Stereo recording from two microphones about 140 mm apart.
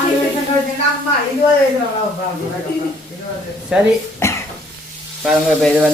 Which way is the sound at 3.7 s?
5° right (ahead or behind).